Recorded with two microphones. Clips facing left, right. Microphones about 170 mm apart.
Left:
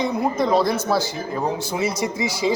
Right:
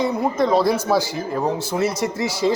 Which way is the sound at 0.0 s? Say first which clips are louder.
Right 1 dB; centre (ahead or behind).